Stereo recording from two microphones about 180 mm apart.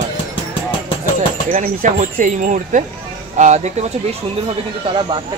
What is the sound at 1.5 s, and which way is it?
Speech, 45° right (ahead or behind).